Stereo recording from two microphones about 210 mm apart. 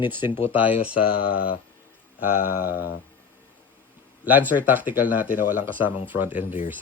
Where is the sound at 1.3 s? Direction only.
45° left (ahead or behind).